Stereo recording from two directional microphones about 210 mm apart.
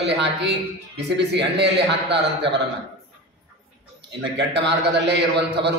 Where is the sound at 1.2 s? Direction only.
55° right (ahead or behind).